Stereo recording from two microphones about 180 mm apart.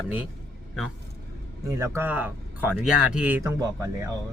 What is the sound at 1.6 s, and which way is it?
A man's voice, 15° right (ahead or behind).